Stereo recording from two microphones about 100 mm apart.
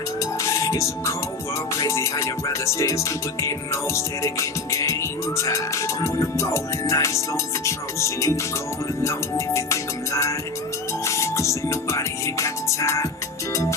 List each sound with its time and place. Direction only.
0.2 s music: 30° left (ahead or behind)